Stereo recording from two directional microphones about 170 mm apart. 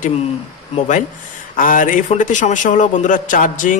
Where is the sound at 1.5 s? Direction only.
50° left (ahead or behind).